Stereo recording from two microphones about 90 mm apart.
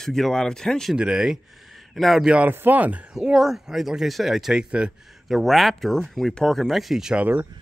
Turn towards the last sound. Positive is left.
turn(degrees=-20)  # may be behind; listen again after turning